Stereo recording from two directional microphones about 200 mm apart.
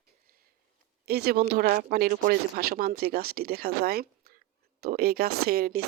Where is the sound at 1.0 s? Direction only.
50° right (ahead or behind).